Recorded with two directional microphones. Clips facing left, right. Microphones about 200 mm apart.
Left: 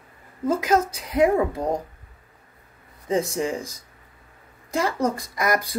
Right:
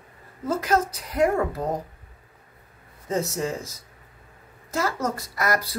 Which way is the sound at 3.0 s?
15° left (ahead or behind).